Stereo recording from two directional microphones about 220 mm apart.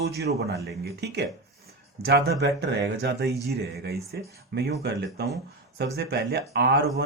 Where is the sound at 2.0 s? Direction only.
50° right (ahead or behind).